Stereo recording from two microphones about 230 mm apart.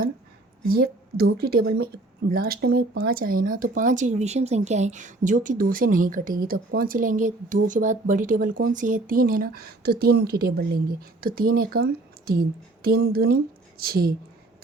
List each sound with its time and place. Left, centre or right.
0.7 s a woman's voice: right